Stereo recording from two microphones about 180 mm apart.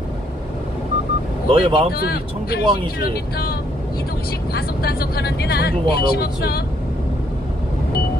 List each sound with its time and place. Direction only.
1.5 s speech: 30° right (ahead or behind)
2.0 s speech: 60° left (ahead or behind)
4.6 s speech: 60° left (ahead or behind)